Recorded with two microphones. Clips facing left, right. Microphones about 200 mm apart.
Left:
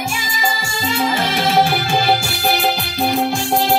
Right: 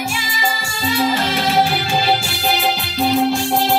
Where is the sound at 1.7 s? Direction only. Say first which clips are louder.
Left 1 dB; 50° left (ahead or behind).